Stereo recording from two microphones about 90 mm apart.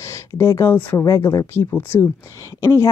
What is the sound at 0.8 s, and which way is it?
Speech, 20° left (ahead or behind).